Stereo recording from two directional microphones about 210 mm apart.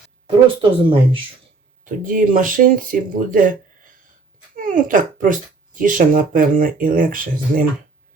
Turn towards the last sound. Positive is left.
turn(degrees=-40)  # may be behind; listen again after turning